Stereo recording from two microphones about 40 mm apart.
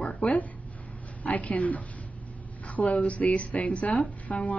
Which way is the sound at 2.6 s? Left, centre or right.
Left.